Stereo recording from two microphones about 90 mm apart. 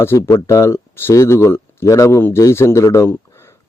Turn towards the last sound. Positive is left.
turn(degrees=30)  # may be behind; listen again after turning